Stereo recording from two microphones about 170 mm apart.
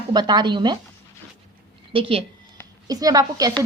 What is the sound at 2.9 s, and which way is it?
Speech, 20° right (ahead or behind).